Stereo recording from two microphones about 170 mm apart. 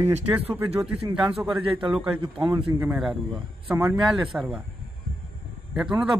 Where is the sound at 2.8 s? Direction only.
10° right (ahead or behind).